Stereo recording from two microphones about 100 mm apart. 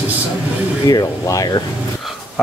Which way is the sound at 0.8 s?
35° left (ahead or behind).